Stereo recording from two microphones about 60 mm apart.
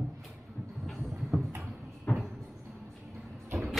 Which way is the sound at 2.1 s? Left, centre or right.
Left.